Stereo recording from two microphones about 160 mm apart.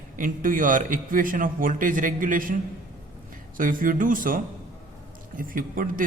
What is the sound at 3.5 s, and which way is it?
A man's voice, 60° right (ahead or behind).